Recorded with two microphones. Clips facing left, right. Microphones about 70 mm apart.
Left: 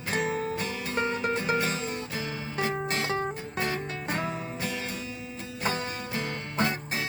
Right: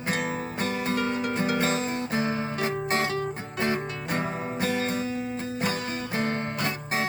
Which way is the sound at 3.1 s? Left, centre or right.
Left.